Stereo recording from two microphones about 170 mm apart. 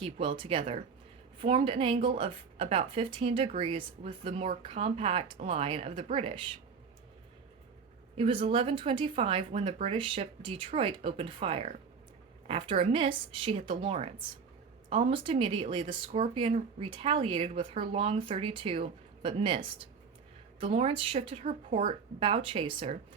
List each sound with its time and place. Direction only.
0.0 s speech: 30° right (ahead or behind)
8.1 s speech: 35° right (ahead or behind)